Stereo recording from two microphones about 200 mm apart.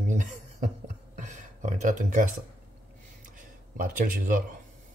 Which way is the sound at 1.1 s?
35° right (ahead or behind).